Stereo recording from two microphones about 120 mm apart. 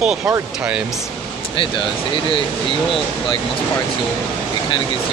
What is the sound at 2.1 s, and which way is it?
Speech, 45° left (ahead or behind).